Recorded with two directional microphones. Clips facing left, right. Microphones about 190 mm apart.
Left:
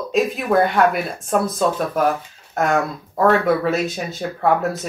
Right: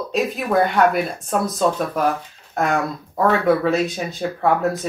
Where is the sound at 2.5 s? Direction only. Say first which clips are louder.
Left 1 dB; centre (ahead or behind).